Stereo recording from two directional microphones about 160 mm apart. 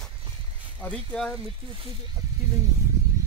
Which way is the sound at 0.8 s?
10° left (ahead or behind).